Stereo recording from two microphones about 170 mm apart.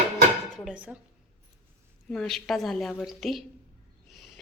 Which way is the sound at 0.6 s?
5° right (ahead or behind).